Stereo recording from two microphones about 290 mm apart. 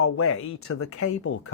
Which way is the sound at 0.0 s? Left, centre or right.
Left.